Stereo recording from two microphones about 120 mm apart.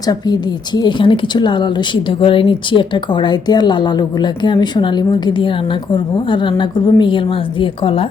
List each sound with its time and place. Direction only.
0.1 s a woman's voice: 35° left (ahead or behind)